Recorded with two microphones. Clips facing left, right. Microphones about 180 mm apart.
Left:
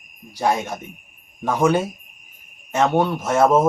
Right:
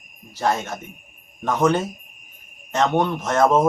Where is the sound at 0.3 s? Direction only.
10° left (ahead or behind).